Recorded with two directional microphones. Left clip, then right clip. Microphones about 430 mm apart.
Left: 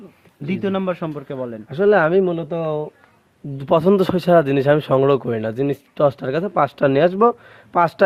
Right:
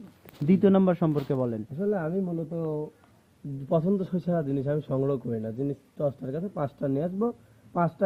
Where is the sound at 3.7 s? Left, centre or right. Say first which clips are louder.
Left 12 dB; left.